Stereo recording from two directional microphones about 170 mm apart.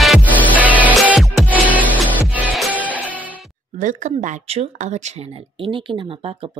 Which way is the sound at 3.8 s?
45° right (ahead or behind).